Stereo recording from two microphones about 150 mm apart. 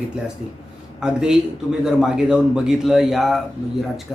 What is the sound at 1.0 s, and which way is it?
Speech, 5° right (ahead or behind).